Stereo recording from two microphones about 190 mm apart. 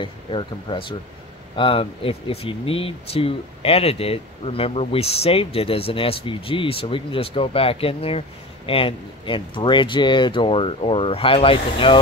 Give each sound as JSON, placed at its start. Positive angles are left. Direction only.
{"t": 0.0, "sound": "speech", "side_deg": 25}